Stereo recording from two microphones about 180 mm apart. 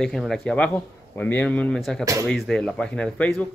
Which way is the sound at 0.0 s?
Centre (ahead or behind).